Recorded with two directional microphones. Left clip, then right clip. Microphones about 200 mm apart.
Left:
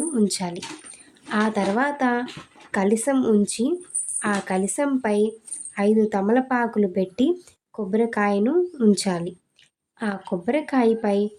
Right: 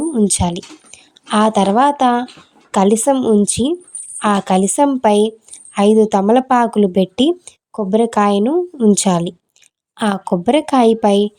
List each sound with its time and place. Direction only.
0.1 s speech: 30° right (ahead or behind)